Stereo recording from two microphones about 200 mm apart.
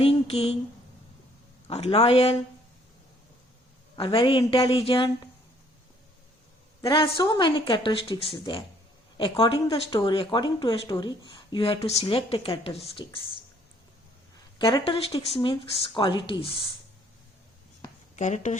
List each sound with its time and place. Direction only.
0.0 s speech: 30° left (ahead or behind)
1.7 s speech: 30° left (ahead or behind)
3.9 s speech: 25° left (ahead or behind)
6.8 s speech: 25° left (ahead or behind)
9.9 s speech: 15° left (ahead or behind)
14.6 s speech: 25° left (ahead or behind)
18.2 s speech: 35° left (ahead or behind)